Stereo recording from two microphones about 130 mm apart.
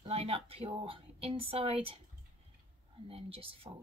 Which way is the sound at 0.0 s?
50° right (ahead or behind).